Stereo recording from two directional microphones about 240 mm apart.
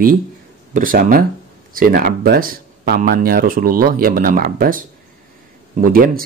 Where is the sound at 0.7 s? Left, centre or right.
Right.